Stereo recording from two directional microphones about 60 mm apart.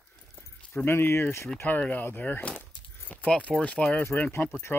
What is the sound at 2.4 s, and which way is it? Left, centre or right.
Keys jangling, left.